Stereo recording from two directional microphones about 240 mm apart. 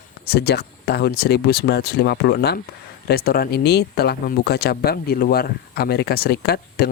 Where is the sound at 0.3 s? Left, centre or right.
Left.